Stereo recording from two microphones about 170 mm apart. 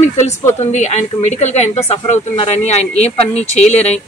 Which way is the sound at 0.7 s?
45° left (ahead or behind).